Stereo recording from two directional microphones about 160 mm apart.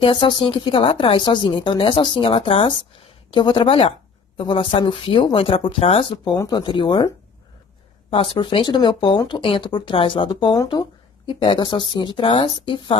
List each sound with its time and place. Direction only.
0.0 s a woman's voice: 30° left (ahead or behind)